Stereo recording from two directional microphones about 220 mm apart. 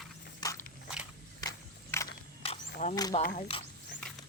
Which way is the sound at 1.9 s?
10° left (ahead or behind).